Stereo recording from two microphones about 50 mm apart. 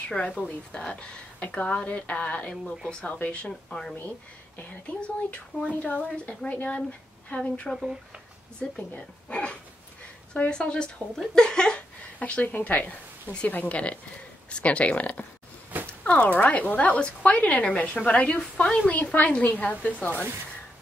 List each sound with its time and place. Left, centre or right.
0.2 s speech: left
2.5 s speech: centre
3.1 s speech: left
5.0 s speech: left
12.2 s a woman's voice: left